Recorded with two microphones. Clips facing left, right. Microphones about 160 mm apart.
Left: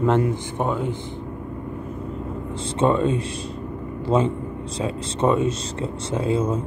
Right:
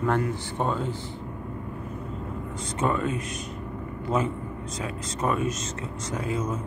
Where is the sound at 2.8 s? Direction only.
30° left (ahead or behind).